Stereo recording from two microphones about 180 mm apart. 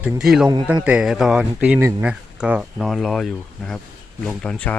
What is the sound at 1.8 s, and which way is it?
Speech, 15° right (ahead or behind).